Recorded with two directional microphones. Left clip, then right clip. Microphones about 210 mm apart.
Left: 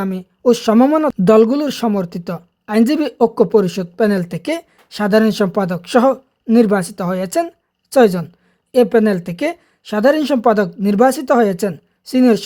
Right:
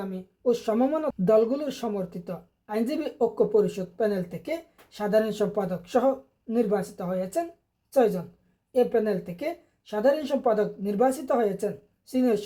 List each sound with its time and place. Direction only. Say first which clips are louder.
0.0 s speech: left 12 dB; 35° left (ahead or behind)